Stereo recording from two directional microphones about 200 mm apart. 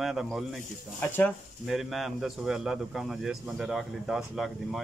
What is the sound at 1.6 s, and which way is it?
Speech, centre (ahead or behind).